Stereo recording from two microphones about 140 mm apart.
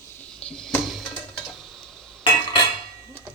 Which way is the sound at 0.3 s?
5° left (ahead or behind).